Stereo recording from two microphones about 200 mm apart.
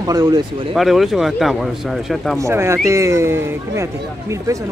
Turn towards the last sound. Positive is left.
turn(degrees=-15)  # may be behind; listen again after turning